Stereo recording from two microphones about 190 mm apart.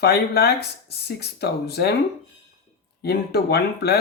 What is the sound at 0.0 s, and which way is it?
Speech, 55° left (ahead or behind).